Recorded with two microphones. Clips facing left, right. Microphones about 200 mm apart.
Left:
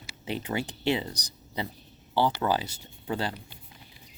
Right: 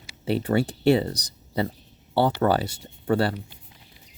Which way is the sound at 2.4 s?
60° right (ahead or behind).